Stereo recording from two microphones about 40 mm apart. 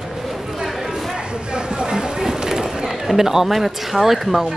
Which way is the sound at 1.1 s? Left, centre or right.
Centre.